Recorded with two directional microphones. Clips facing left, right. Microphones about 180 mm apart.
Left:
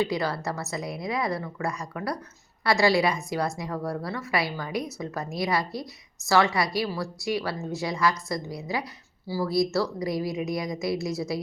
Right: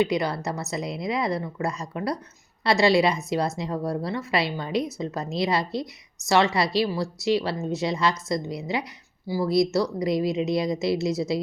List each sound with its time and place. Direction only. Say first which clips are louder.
0.0 s a woman's voice: right 3 dB; 20° right (ahead or behind)